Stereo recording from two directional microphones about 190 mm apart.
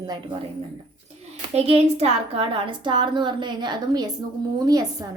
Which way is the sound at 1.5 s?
35° right (ahead or behind).